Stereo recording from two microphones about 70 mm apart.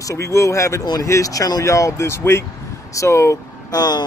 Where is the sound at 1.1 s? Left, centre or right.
Left.